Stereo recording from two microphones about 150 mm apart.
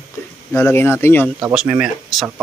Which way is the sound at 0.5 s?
15° left (ahead or behind).